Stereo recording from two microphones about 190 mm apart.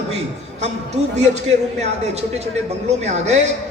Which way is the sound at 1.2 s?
35° right (ahead or behind).